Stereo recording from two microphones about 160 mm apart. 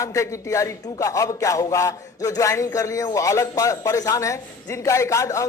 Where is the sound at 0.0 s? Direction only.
20° left (ahead or behind).